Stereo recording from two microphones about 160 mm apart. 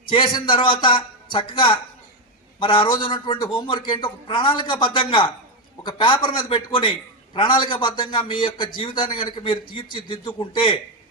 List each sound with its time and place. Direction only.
0.1 s a man's voice: 30° left (ahead or behind)